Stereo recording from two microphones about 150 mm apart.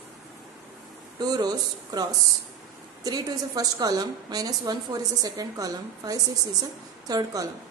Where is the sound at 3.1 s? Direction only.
25° right (ahead or behind).